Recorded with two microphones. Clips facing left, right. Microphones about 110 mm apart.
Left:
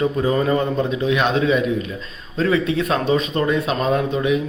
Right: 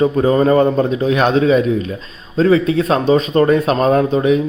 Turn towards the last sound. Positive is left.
turn(degrees=-40)  # may be behind; listen again after turning